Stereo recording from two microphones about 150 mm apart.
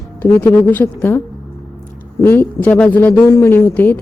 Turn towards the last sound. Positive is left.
turn(degrees=15)  # may be behind; listen again after turning